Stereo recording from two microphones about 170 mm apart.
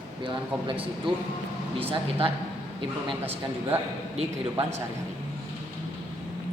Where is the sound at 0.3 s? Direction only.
30° right (ahead or behind).